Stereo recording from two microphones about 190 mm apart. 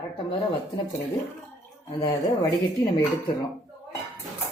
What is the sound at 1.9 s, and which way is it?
Speech, 20° left (ahead or behind).